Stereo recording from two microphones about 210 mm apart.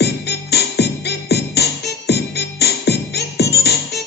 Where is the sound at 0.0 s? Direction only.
50° left (ahead or behind).